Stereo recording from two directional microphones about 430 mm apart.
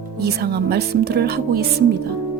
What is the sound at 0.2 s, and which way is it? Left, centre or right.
Speech, right.